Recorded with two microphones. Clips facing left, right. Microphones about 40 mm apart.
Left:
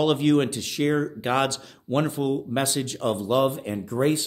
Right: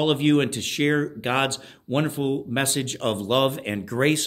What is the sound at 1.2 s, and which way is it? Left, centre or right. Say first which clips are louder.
Speech: even; right.